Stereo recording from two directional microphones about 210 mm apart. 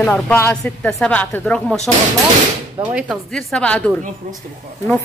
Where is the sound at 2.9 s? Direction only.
Centre (ahead or behind).